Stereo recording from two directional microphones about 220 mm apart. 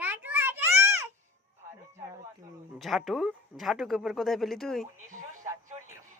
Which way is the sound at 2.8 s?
Centre (ahead or behind).